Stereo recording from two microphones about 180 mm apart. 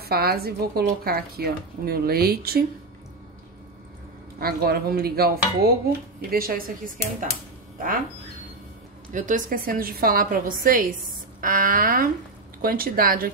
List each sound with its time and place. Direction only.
0.0 s speech: 60° right (ahead or behind)
4.4 s speech: 55° right (ahead or behind)
9.1 s a woman's voice: 45° right (ahead or behind)